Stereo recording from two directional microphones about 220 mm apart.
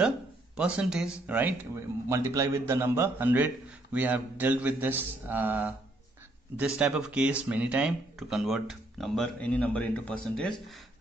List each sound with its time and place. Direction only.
0.6 s speech: 5° right (ahead or behind)
6.8 s speech: 5° right (ahead or behind)